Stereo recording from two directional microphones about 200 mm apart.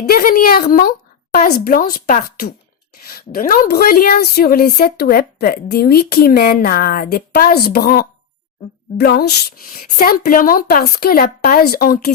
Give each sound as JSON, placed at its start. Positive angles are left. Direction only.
{"t": 0.0, "sound": "speech", "side_deg": 45}